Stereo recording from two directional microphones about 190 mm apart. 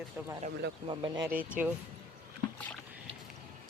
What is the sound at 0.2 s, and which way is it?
Speech, 10° right (ahead or behind).